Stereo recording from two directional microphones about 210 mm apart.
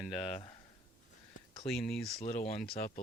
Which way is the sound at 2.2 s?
35° left (ahead or behind).